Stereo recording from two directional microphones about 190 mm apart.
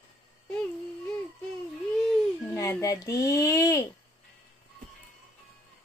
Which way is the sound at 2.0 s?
15° left (ahead or behind).